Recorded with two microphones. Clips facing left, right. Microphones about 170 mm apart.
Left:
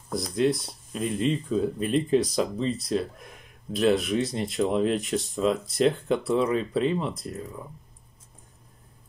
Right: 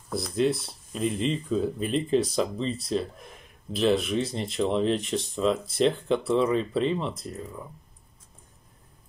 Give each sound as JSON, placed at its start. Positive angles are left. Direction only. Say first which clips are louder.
{"t": 0.1, "sound": "speech", "louder": "left 1 dB", "side_deg": 0}